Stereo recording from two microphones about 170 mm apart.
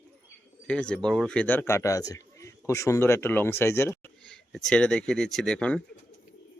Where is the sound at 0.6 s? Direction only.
5° left (ahead or behind).